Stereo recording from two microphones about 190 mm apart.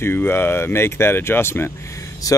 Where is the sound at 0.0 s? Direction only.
10° left (ahead or behind).